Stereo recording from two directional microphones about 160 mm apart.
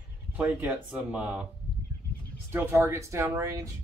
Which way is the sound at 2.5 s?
15° right (ahead or behind).